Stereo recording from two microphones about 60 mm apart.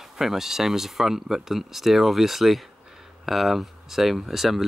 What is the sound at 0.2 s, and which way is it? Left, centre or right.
Speech, centre.